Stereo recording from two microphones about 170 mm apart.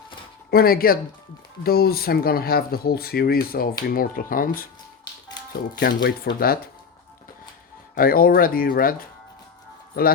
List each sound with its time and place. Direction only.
0.5 s speech: 60° left (ahead or behind)
6.0 s speech: 65° left (ahead or behind)
7.9 s speech: 60° left (ahead or behind)